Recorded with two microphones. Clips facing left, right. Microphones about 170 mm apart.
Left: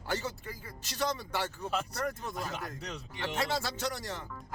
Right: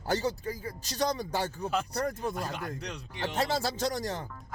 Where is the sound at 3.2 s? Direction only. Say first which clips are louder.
Right 3 dB; 40° right (ahead or behind).